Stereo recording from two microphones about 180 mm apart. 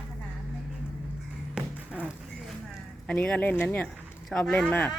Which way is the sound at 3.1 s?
5° left (ahead or behind).